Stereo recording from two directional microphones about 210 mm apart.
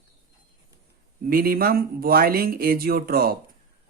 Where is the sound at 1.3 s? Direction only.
45° right (ahead or behind).